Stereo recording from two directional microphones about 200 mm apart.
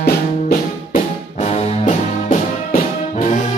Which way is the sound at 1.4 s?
35° left (ahead or behind).